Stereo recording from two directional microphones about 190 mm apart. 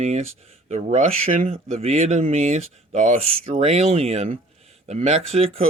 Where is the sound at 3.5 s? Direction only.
30° right (ahead or behind).